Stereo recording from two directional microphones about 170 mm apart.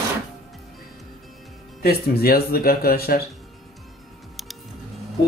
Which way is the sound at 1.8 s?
65° left (ahead or behind).